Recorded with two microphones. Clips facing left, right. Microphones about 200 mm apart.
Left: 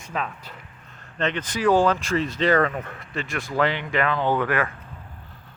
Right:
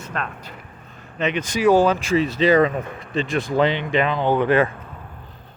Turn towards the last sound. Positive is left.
turn(degrees=-25)  # may be behind; listen again after turning